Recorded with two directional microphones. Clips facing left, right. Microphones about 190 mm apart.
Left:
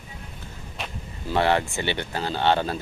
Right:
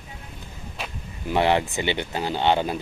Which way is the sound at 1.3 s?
15° right (ahead or behind).